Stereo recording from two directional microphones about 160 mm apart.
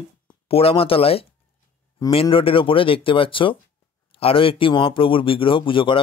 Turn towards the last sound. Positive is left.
turn(degrees=30)  # may be behind; listen again after turning